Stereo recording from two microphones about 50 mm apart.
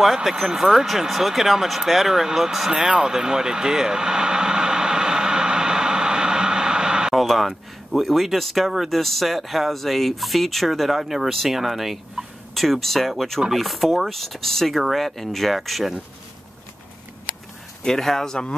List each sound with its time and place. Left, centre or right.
0.0 s speech: centre
2.8 s vehicle: centre
7.2 s speech: centre
17.8 s speech: centre